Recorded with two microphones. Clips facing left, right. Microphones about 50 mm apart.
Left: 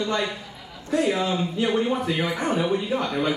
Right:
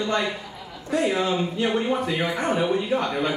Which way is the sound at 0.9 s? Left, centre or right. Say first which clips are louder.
Even; centre.